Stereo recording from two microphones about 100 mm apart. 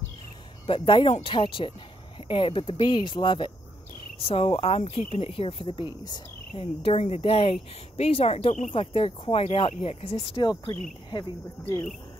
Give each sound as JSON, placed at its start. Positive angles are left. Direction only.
{"t": 0.7, "sound": "speech", "side_deg": 60}
{"t": 1.3, "sound": "speech", "side_deg": 55}
{"t": 4.2, "sound": "speech", "side_deg": 70}
{"t": 6.5, "sound": "speech", "side_deg": 75}
{"t": 8.0, "sound": "speech", "side_deg": 85}